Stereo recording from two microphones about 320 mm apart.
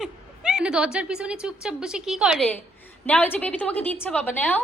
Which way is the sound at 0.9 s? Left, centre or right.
Centre.